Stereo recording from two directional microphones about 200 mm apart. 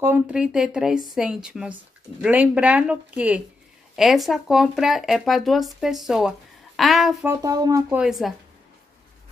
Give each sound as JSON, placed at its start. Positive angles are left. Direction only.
{"t": 0.0, "sound": "speech", "side_deg": -5}
{"t": 7.2, "sound": "speech", "side_deg": -15}
{"t": 8.0, "sound": "speech", "side_deg": 0}